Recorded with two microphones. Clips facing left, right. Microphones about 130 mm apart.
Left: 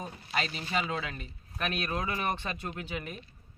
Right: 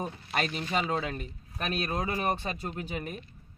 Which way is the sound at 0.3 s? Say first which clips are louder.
Right 2 dB; 50° right (ahead or behind).